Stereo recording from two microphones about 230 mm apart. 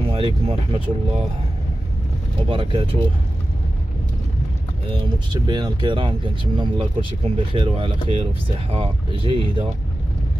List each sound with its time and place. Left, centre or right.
0.0 s speech: right
2.5 s speech: right
5.3 s speech: centre